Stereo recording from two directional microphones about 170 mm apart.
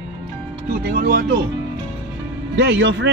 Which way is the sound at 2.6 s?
90° right.